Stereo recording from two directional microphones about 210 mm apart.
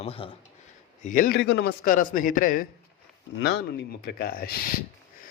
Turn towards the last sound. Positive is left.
turn(degrees=45)  # may be behind; listen again after turning